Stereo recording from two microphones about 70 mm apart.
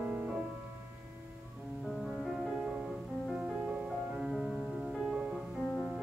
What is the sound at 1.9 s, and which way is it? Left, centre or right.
Music, centre.